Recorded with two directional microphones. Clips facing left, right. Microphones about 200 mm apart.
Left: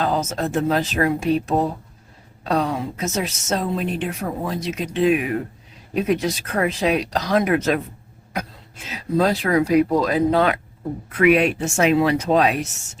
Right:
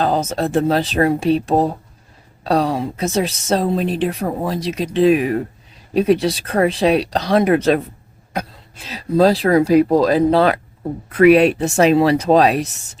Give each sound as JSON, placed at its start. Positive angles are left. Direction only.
{"t": 0.0, "sound": "a woman's voice", "side_deg": -30}